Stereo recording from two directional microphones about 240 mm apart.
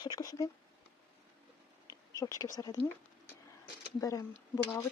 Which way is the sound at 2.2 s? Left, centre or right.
Centre.